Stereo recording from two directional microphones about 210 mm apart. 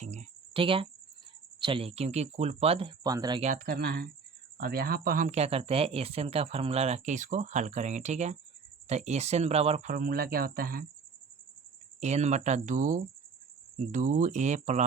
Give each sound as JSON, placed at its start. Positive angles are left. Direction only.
{"t": 0.0, "sound": "cricket", "side_deg": -30}
{"t": 1.6, "sound": "speech", "side_deg": -25}
{"t": 3.4, "sound": "speech", "side_deg": -40}
{"t": 11.9, "sound": "speech", "side_deg": -30}